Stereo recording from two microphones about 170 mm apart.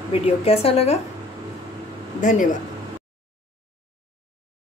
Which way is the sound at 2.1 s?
50° left (ahead or behind).